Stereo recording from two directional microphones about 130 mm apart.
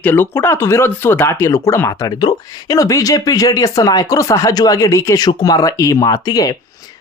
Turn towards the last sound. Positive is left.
turn(degrees=30)  # may be behind; listen again after turning